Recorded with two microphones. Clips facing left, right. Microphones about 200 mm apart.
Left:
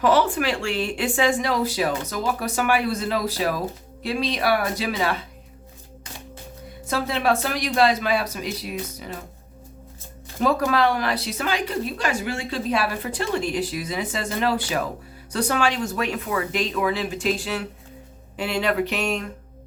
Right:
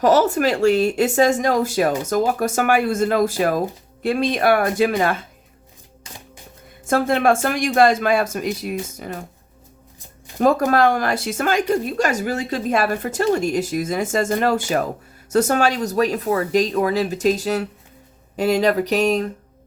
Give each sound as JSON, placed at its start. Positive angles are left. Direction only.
{"t": 0.0, "sound": "a woman's voice", "side_deg": -40}
{"t": 6.8, "sound": "a woman's voice", "side_deg": -50}
{"t": 10.4, "sound": "a woman's voice", "side_deg": -45}